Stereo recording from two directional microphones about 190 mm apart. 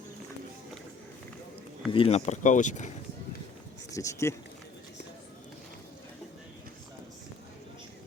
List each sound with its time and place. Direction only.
1.9 s speech: 30° left (ahead or behind)
3.9 s speech: 15° left (ahead or behind)